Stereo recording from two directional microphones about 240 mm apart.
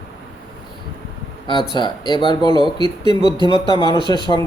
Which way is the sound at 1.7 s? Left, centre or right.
Centre.